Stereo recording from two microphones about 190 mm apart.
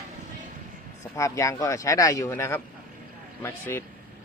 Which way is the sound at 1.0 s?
15° left (ahead or behind).